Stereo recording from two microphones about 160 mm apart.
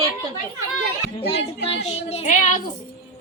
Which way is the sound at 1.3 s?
40° left (ahead or behind).